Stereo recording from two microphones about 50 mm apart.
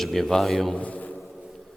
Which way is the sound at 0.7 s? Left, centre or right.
Left.